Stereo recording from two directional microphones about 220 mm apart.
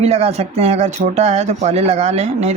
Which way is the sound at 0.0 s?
30° right (ahead or behind).